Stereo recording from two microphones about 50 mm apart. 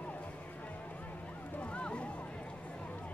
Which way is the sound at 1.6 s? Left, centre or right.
Left.